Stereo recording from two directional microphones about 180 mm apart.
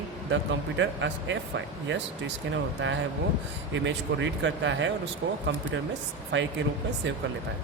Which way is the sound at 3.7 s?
90° right.